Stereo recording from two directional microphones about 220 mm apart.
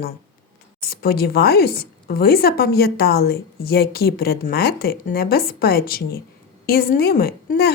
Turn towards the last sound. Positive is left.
turn(degrees=45)  # may be behind; listen again after turning